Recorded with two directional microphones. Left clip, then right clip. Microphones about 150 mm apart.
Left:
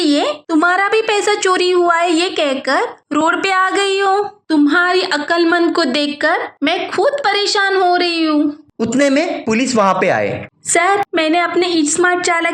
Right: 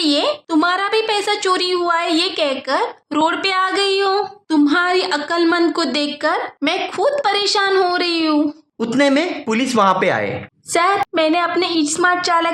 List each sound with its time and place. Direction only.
0.0 s speech: 35° left (ahead or behind)